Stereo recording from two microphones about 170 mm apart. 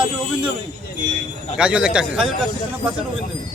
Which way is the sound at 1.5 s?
5° right (ahead or behind).